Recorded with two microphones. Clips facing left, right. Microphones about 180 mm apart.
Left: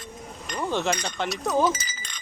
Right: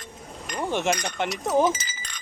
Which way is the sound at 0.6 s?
15° right (ahead or behind).